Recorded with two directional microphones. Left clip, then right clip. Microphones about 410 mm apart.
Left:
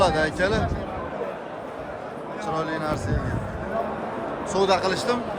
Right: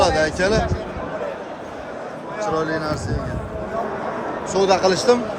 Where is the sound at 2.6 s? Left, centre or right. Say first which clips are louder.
Right 2 dB; centre.